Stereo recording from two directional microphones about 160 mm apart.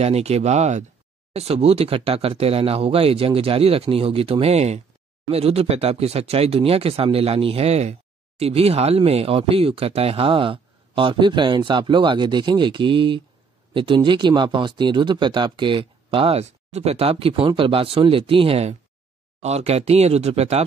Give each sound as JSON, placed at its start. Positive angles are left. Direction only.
{"t": 0.0, "sound": "speech", "side_deg": -40}